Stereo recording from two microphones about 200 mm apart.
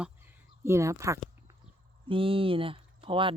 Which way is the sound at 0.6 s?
15° right (ahead or behind).